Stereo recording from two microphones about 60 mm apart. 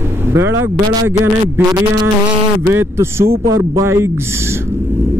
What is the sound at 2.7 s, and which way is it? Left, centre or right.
Speech, right.